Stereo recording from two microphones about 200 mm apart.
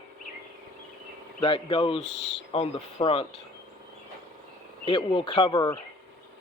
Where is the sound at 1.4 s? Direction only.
25° left (ahead or behind).